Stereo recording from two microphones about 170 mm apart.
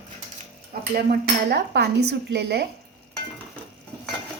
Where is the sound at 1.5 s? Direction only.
80° right.